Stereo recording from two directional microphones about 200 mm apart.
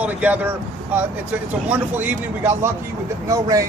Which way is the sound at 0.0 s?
5° right (ahead or behind).